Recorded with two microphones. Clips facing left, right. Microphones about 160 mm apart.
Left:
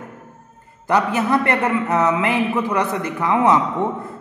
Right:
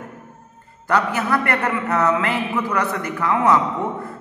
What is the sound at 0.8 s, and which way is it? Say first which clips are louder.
A man's voice: left 2 dB; 20° left (ahead or behind).